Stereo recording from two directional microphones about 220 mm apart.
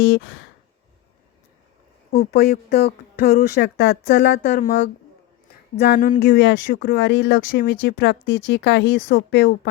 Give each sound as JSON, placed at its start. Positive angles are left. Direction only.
{"t": 0.0, "sound": "speech", "side_deg": 50}
{"t": 2.1, "sound": "speech", "side_deg": 45}
{"t": 6.4, "sound": "speech", "side_deg": 55}